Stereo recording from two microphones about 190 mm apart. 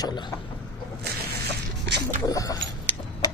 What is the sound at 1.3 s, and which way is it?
Zipper, 60° right (ahead or behind).